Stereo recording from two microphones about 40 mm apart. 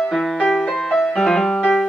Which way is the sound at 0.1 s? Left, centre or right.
Centre.